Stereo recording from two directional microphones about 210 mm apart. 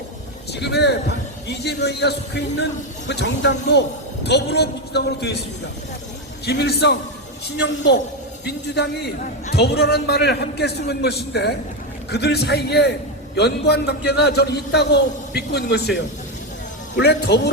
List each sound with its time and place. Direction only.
0.6 s a man's voice: 50° left (ahead or behind)
6.4 s a man's voice: 50° left (ahead or behind)
17.0 s a man's voice: 50° left (ahead or behind)